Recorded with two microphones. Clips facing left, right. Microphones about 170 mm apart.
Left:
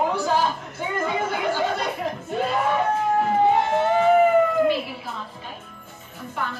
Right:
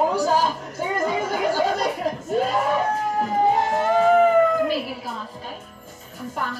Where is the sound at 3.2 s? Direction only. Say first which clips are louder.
Right 1 dB; 40° right (ahead or behind).